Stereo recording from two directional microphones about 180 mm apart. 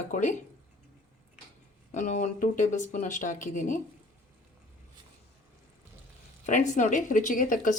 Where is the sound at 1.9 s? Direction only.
40° left (ahead or behind).